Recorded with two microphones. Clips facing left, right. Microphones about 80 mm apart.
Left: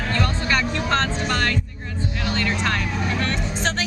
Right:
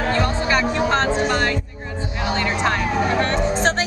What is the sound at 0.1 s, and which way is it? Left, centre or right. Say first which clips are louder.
Speech: right 1 dB; centre.